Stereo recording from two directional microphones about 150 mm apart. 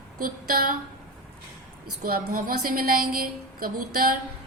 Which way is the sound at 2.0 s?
85° right.